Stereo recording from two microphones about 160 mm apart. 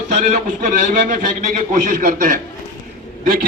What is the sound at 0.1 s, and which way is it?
A man's voice, 50° right (ahead or behind).